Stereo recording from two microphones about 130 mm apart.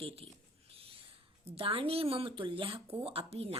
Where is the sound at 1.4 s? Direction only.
45° right (ahead or behind).